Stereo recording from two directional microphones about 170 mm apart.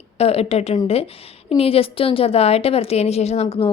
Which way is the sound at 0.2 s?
35° left (ahead or behind).